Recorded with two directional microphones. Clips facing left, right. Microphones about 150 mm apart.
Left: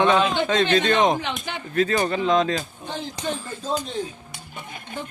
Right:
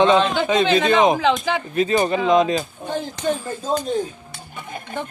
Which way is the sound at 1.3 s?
90° right.